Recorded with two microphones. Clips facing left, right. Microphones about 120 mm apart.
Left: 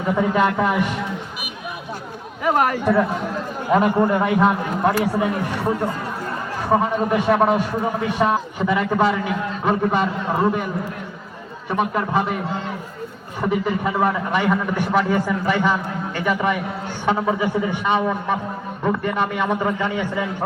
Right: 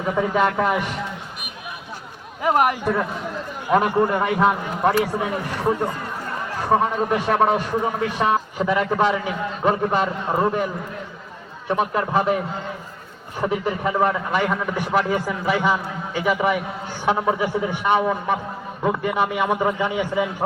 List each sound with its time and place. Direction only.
0.2 s a man's voice: centre (ahead or behind)
2.4 s a man's voice: 20° right (ahead or behind)
3.7 s a man's voice: 5° right (ahead or behind)
6.7 s a man's voice: centre (ahead or behind)
11.7 s a man's voice: centre (ahead or behind)
13.4 s a man's voice: centre (ahead or behind)